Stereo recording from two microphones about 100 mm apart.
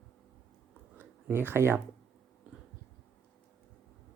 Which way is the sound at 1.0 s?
20° right (ahead or behind).